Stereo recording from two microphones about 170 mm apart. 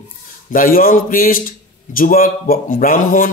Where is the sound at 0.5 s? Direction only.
55° left (ahead or behind).